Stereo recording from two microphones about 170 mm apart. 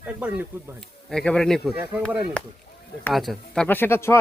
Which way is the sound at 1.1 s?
5° left (ahead or behind).